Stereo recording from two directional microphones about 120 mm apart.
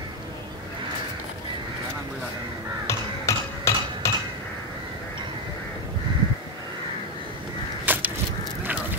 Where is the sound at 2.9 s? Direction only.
25° left (ahead or behind).